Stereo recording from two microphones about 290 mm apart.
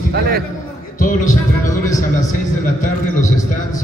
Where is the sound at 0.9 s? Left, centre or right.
Left.